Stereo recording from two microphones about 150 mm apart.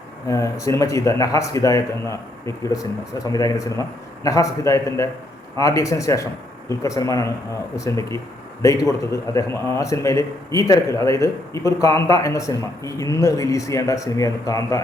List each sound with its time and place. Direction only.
0.3 s a man's voice: 20° left (ahead or behind)